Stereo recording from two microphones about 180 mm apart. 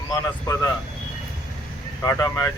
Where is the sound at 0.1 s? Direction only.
20° left (ahead or behind).